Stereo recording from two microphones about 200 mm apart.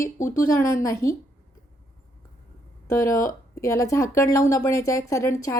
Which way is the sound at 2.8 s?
15° left (ahead or behind).